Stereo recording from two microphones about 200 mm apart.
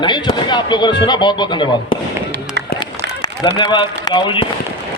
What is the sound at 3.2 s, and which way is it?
Speech, 25° left (ahead or behind).